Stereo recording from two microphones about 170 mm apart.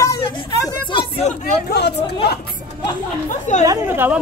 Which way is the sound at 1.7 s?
75° left (ahead or behind).